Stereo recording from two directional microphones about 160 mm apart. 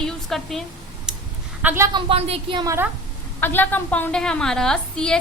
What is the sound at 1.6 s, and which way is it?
Speech, 15° right (ahead or behind).